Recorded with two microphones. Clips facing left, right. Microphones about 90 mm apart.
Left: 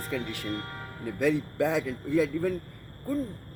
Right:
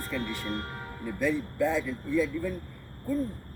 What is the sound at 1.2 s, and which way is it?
Speech, 90° left.